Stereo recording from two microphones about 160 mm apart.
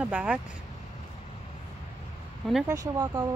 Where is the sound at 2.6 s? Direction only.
20° right (ahead or behind).